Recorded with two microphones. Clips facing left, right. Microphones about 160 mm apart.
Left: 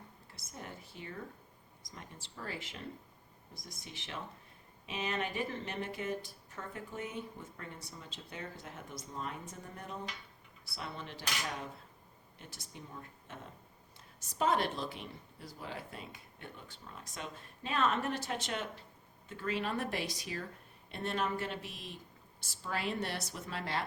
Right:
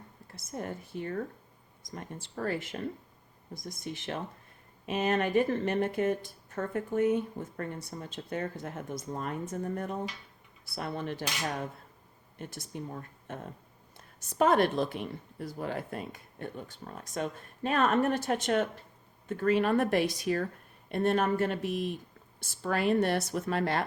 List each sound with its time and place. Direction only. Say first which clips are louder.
0.3 s speech: right 10 dB; 50° right (ahead or behind)
12.4 s speech: right 11 dB; 50° right (ahead or behind)